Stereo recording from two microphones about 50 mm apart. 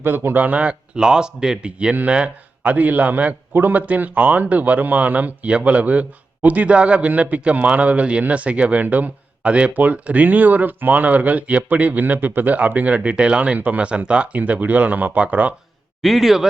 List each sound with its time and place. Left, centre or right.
0.0 s a man's voice: right
0.4 s a man's voice: right
16.0 s a man's voice: centre